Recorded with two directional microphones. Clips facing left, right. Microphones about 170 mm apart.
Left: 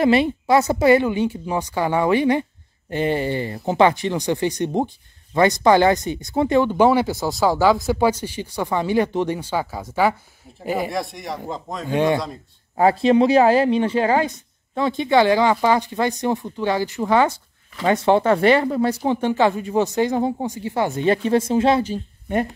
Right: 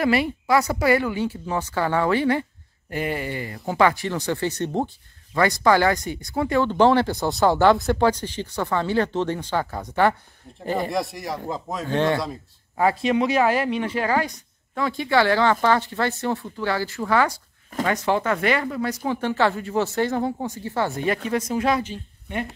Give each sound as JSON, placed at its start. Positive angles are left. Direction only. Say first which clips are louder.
{"t": 0.0, "sound": "speech", "louder": "left 4 dB", "side_deg": 25}
{"t": 6.7, "sound": "speech", "louder": "left 1 dB", "side_deg": 10}
{"t": 11.9, "sound": "speech", "louder": "left 3 dB", "side_deg": 15}
{"t": 12.7, "sound": "speech", "louder": "left 5 dB", "side_deg": 30}
{"t": 19.2, "sound": "speech", "louder": "left 2 dB", "side_deg": 15}
{"t": 21.9, "sound": "a woman's voice", "louder": "left 7 dB", "side_deg": 45}